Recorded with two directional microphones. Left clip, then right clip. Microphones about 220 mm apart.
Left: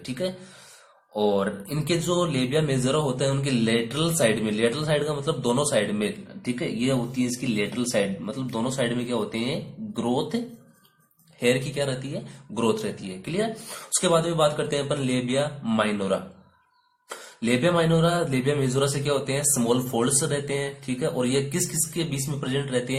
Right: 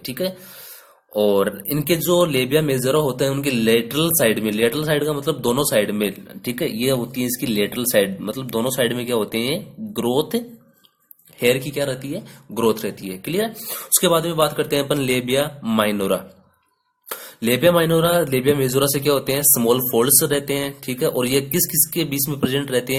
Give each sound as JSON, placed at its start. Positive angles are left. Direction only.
{"t": 0.0, "sound": "speech", "side_deg": -40}